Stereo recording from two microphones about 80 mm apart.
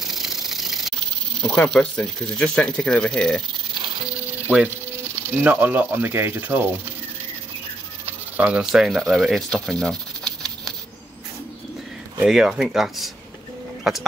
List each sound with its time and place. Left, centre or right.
0.0 s rattle: centre
1.4 s speech: centre
5.4 s speech: right
8.0 s a sound: centre
8.8 s speech: centre
12.3 s speech: centre